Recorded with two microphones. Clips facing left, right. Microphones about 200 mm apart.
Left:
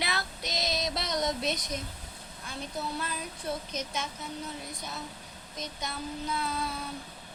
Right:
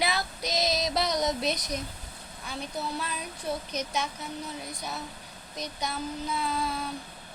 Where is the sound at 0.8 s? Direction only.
Centre (ahead or behind).